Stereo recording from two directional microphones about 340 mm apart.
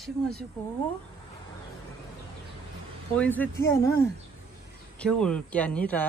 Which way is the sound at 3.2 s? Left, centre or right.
Centre.